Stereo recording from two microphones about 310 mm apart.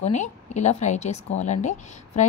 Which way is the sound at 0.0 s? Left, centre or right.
Left.